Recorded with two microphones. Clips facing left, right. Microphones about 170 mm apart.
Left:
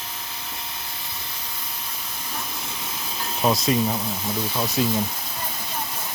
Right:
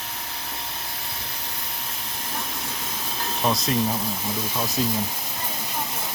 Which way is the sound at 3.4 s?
5° left (ahead or behind).